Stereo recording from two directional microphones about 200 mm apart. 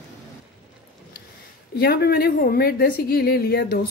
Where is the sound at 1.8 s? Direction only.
50° left (ahead or behind).